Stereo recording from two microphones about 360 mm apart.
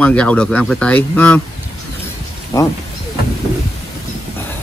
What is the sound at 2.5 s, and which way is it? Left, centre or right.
Speech, centre.